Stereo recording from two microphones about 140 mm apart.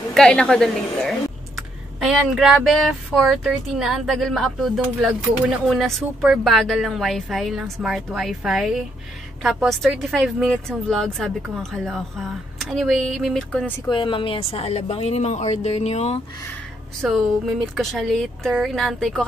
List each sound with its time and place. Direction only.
0.1 s speech: 5° left (ahead or behind)
13.8 s a woman's voice: 35° left (ahead or behind)
17.0 s speech: centre (ahead or behind)